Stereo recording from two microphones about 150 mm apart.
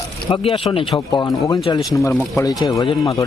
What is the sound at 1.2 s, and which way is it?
Speech, 20° left (ahead or behind).